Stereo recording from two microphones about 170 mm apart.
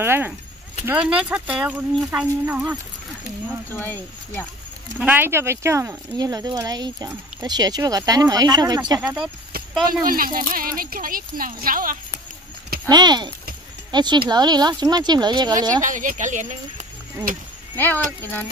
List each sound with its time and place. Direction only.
0.0 s speech: 15° right (ahead or behind)
3.8 s speech: 10° left (ahead or behind)
4.9 s speech: 10° right (ahead or behind)
9.0 s speech: 5° right (ahead or behind)
9.8 s speech: 55° right (ahead or behind)
12.8 s speech: 25° right (ahead or behind)
15.8 s speech: 50° right (ahead or behind)
17.7 s speech: 10° left (ahead or behind)